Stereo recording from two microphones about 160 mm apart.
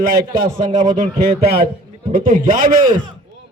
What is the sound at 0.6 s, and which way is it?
Speech, 50° right (ahead or behind).